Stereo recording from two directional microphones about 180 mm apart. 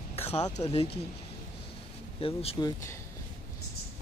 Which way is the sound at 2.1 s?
30° left (ahead or behind).